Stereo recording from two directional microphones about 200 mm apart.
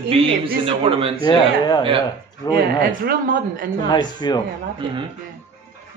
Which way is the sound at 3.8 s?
20° left (ahead or behind).